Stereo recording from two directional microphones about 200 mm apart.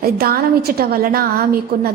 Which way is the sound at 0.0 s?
50° right (ahead or behind).